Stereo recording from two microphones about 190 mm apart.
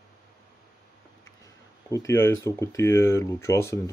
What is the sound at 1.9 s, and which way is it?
Speech, 15° left (ahead or behind).